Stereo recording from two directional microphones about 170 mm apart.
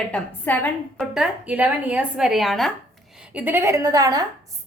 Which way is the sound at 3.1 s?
10° right (ahead or behind).